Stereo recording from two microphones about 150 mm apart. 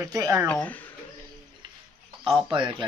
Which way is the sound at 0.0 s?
20° right (ahead or behind).